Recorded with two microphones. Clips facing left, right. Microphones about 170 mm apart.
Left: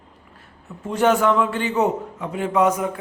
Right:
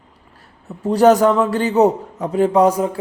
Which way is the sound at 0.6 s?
35° right (ahead or behind).